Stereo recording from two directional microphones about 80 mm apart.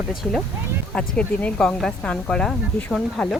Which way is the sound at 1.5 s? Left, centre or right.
Centre.